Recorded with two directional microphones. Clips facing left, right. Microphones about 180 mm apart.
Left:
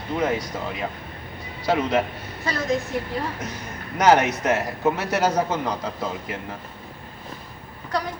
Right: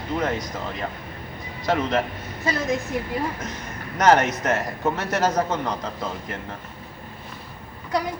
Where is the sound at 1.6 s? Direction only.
10° left (ahead or behind).